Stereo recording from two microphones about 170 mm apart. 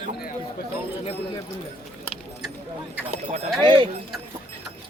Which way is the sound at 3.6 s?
25° right (ahead or behind).